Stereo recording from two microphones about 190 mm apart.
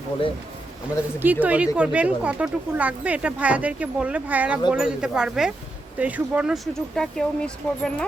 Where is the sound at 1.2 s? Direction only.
10° right (ahead or behind).